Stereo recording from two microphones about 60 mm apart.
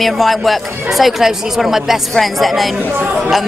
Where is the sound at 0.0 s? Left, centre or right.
Centre.